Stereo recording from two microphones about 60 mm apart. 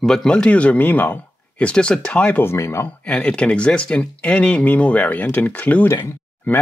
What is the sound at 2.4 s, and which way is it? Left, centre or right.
Speech, left.